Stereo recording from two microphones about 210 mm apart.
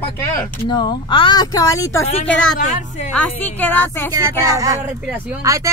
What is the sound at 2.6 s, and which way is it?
Speech, 35° left (ahead or behind).